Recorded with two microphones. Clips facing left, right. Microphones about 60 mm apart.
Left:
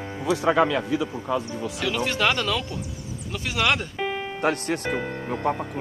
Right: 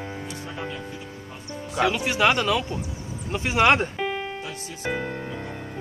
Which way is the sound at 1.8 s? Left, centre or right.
Centre.